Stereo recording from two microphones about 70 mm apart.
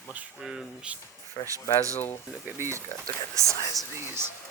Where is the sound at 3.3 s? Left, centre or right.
Right.